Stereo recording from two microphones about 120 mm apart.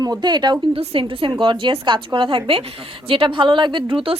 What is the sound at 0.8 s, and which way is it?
A woman's voice, 50° right (ahead or behind).